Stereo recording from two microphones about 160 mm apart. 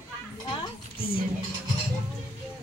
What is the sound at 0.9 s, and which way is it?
Music, 35° left (ahead or behind).